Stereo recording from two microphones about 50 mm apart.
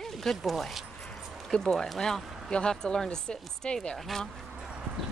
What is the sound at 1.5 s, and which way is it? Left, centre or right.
Speech, centre.